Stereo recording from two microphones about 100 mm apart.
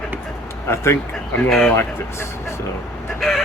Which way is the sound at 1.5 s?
5° left (ahead or behind).